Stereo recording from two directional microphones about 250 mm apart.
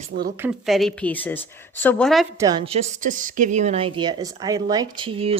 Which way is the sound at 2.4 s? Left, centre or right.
Centre.